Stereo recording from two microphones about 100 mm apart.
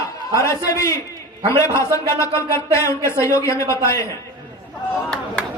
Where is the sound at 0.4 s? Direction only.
30° left (ahead or behind).